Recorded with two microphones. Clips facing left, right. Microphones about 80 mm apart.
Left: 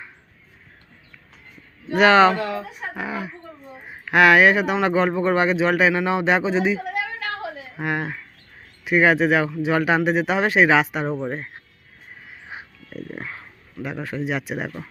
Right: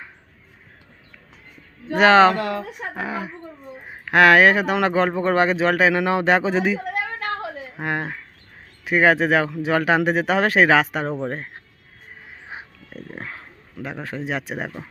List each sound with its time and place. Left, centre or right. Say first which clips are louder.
1.9 s speech: right 1 dB; right
2.3 s speech: right 1 dB; right
2.6 s a sound: right 1 dB; right
3.0 s a sound: right 1 dB; right
3.8 s a woman's voice: right 1 dB; right
12.5 s wild animals: even; right
13.8 s speech: left 2 dB; right